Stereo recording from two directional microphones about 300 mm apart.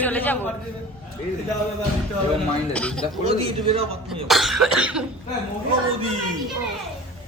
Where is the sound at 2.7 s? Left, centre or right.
Centre.